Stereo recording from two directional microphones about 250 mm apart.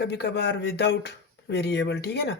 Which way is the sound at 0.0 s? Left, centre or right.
Left.